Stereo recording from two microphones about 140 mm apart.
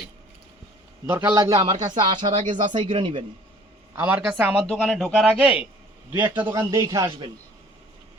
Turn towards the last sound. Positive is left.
turn(degrees=-35)  # may be behind; listen again after turning